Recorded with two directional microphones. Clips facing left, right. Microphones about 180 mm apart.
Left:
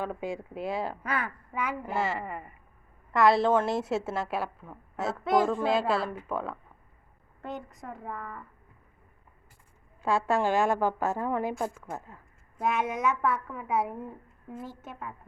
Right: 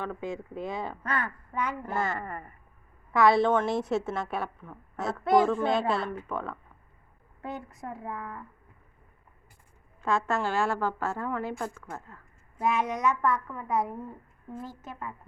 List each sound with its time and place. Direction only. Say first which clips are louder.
0.0 s a woman's voice: left 1 dB; 10° left (ahead or behind); by 8.4 s 5° right (ahead or behind)
10.0 s a woman's voice: left 2 dB; 10° left (ahead or behind)
12.5 s a woman's voice: right 1 dB; centre (ahead or behind)